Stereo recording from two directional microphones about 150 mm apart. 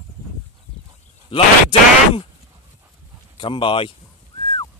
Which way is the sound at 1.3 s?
35° left (ahead or behind).